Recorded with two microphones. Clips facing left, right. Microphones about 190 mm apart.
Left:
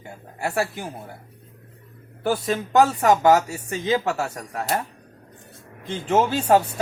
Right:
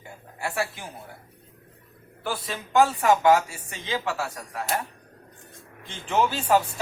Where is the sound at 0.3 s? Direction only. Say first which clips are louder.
Left 4 dB; 40° left (ahead or behind).